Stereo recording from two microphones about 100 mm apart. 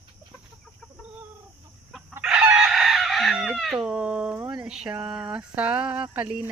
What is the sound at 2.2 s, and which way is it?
Chicken, 10° right (ahead or behind).